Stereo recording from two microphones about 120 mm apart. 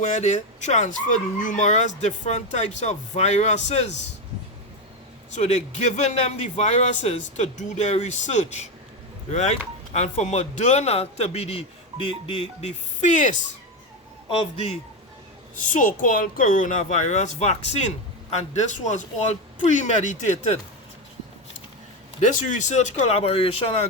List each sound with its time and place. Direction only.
0.0 s speech: 75° left (ahead or behind)
5.3 s speech: 75° left (ahead or behind)
12.2 s speech: 50° left (ahead or behind)
13.0 s a child's voice: 90° left
14.3 s a man's voice: 55° left (ahead or behind)
15.5 s a child's voice: 90° left
22.2 s speech: 85° left; by 23.8 s 55° left (ahead or behind)